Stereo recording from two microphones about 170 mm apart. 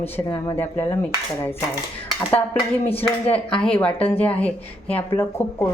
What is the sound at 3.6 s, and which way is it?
Speech, 10° left (ahead or behind).